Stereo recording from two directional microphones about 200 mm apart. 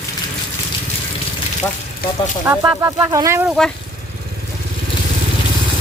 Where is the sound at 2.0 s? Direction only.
45° left (ahead or behind).